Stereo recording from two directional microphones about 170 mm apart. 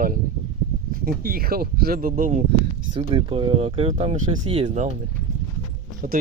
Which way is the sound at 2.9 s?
30° right (ahead or behind).